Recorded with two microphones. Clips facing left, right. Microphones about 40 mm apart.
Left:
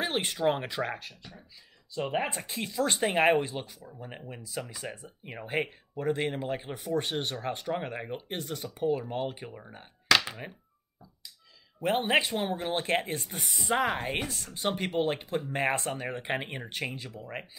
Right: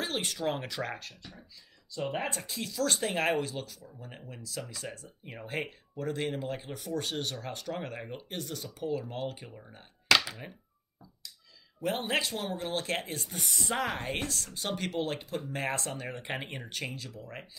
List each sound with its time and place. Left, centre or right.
0.0 s speech: left
0.9 s speech: centre
2.0 s speech: left
11.8 s speech: left